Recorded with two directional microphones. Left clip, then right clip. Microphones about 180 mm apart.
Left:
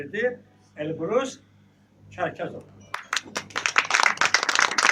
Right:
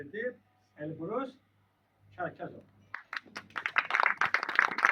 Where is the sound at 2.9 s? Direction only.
55° left (ahead or behind).